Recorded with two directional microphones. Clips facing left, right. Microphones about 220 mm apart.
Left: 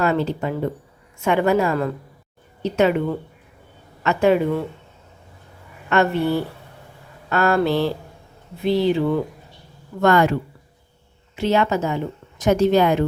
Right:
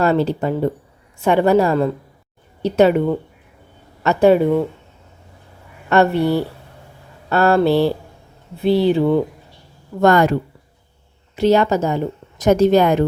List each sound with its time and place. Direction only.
0.0 s speech: 35° right (ahead or behind)
4.0 s speech: 35° right (ahead or behind)
5.9 s speech: 35° right (ahead or behind)
11.3 s speech: 40° right (ahead or behind)